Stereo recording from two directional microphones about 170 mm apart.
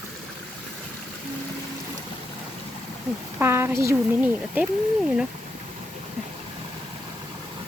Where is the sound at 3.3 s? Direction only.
15° right (ahead or behind).